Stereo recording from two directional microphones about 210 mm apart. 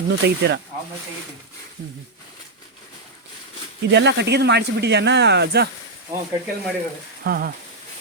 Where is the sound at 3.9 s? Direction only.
55° right (ahead or behind).